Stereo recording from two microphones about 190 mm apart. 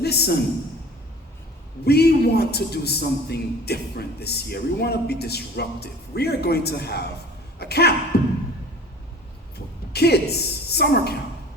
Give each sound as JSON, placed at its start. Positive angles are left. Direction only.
{"t": 0.0, "sound": "a man's voice", "side_deg": 60}
{"t": 1.8, "sound": "a man's voice", "side_deg": 55}
{"t": 8.1, "sound": "beatboxing", "side_deg": 55}
{"t": 9.9, "sound": "a man's voice", "side_deg": 60}